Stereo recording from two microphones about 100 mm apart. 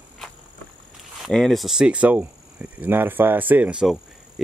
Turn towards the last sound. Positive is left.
turn(degrees=-15)  # may be behind; listen again after turning